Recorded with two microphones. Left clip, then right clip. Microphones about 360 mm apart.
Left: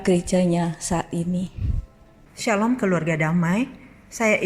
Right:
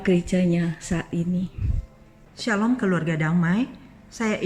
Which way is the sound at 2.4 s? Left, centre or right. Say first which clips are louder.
Left 2 dB; centre.